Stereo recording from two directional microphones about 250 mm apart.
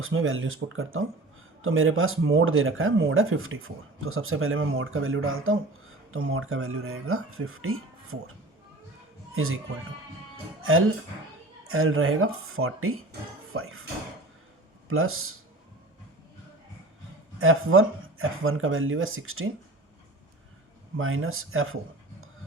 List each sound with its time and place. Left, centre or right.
0.0 s speech: right
9.3 s speech: right
10.6 s speech: right
14.8 s speech: right
17.4 s speech: right
21.0 s speech: right